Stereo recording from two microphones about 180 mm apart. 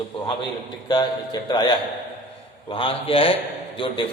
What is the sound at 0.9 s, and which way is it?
A man's voice, 25° left (ahead or behind).